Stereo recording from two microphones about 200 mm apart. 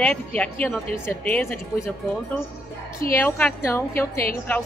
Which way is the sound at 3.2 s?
10° left (ahead or behind).